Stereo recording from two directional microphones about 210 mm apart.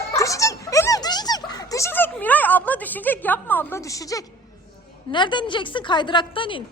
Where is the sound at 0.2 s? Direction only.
15° left (ahead or behind).